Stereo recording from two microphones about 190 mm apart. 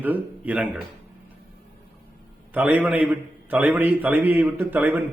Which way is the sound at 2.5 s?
10° right (ahead or behind).